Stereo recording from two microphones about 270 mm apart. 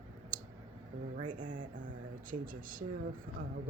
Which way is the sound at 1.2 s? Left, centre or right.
Right.